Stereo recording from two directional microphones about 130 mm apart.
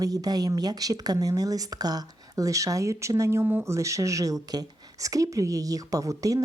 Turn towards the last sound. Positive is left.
turn(degrees=-25)  # may be behind; listen again after turning